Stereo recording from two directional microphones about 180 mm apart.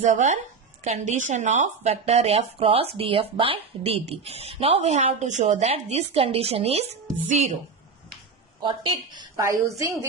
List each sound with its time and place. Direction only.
0.0 s a woman's voice: 45° right (ahead or behind)
8.6 s a woman's voice: 25° right (ahead or behind)